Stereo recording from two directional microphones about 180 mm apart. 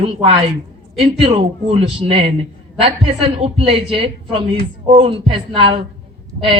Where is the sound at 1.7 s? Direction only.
35° right (ahead or behind).